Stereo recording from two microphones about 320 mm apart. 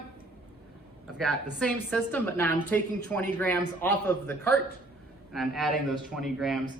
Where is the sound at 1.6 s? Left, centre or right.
Centre.